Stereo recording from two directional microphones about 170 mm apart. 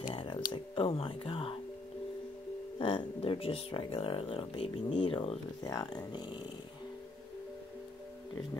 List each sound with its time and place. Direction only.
0.1 s a sound: 30° left (ahead or behind)
2.8 s speech: 30° left (ahead or behind)
5.7 s speech: 20° left (ahead or behind)